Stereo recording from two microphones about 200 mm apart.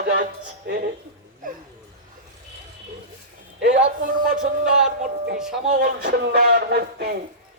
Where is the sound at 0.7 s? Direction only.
55° right (ahead or behind).